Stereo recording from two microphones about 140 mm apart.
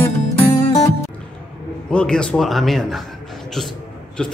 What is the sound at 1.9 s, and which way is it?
Speech, 5° left (ahead or behind).